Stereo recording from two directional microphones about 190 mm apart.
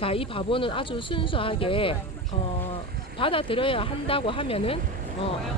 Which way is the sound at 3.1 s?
30° left (ahead or behind).